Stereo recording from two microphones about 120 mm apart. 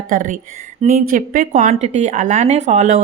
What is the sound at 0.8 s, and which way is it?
A woman's voice, 65° right (ahead or behind).